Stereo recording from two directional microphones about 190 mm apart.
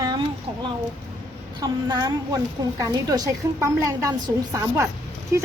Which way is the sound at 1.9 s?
20° right (ahead or behind).